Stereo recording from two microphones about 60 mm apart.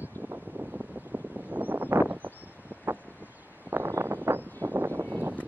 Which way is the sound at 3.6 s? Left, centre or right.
Right.